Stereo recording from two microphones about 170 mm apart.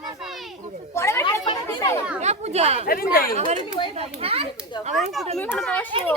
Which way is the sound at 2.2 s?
40° right (ahead or behind).